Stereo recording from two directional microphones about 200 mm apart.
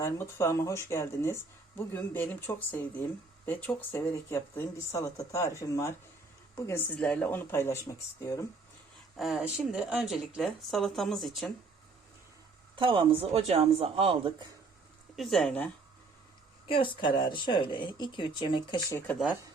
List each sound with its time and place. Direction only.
0.0 s speech: 15° left (ahead or behind)
9.1 s speech: centre (ahead or behind)
12.7 s speech: 25° right (ahead or behind)
15.1 s speech: centre (ahead or behind)
16.6 s speech: 25° left (ahead or behind)